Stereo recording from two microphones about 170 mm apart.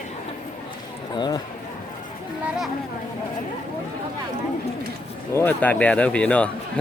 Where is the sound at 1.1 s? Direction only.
25° left (ahead or behind).